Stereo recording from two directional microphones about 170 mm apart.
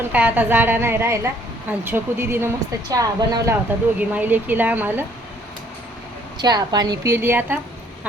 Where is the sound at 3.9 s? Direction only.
10° right (ahead or behind).